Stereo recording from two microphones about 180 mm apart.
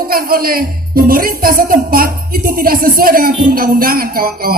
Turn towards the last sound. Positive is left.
turn(degrees=-55)  # may be behind; listen again after turning